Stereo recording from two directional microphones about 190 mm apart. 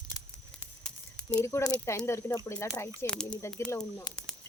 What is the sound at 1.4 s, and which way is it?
Speech, 15° left (ahead or behind).